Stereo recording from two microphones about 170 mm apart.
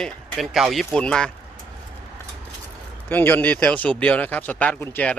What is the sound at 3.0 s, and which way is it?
Speech, 10° left (ahead or behind).